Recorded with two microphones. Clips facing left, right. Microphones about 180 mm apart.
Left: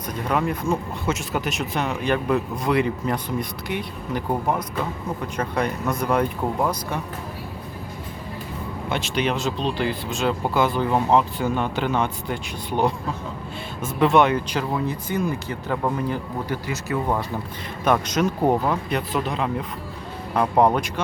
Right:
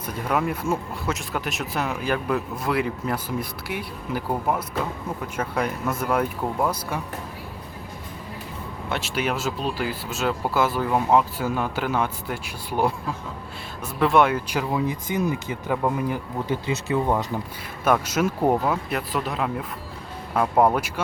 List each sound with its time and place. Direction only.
0.3 s speech: 5° right (ahead or behind)
8.9 s speech: 5° right (ahead or behind)
16.5 s speech: 20° right (ahead or behind)
17.8 s speech: 5° right (ahead or behind)